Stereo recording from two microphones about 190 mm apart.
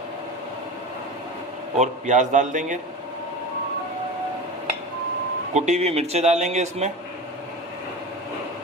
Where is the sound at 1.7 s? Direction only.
40° right (ahead or behind).